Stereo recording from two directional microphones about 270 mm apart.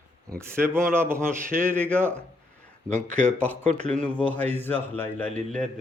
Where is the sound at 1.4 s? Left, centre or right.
Right.